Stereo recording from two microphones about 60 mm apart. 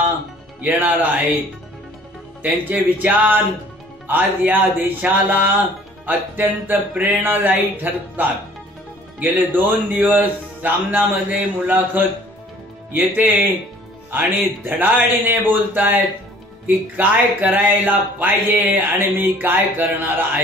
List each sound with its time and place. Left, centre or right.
0.6 s speech: right
2.4 s speech: right
14.8 s speech: right